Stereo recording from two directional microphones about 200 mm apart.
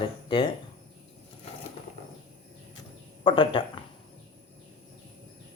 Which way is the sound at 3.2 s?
25° left (ahead or behind).